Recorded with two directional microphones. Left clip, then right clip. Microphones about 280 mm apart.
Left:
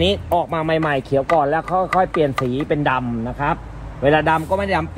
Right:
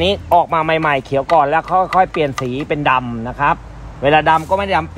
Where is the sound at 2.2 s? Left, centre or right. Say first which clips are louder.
Even; centre.